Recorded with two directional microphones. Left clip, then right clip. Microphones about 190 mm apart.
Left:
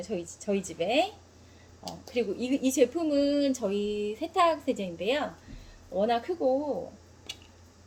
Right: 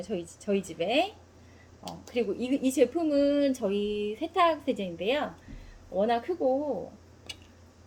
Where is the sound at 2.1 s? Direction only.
5° right (ahead or behind).